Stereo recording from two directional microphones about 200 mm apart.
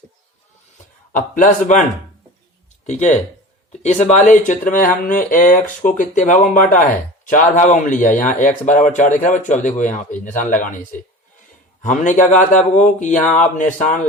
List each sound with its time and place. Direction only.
1.1 s speech: 40° left (ahead or behind)
2.8 s speech: 35° left (ahead or behind)
11.8 s speech: 40° left (ahead or behind)